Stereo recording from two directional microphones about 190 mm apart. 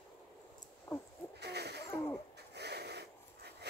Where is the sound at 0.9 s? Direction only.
20° left (ahead or behind).